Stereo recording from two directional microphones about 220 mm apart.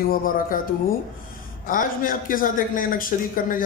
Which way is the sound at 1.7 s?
40° left (ahead or behind).